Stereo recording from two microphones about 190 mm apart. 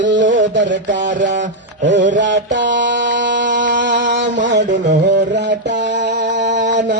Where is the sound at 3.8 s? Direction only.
70° right (ahead or behind).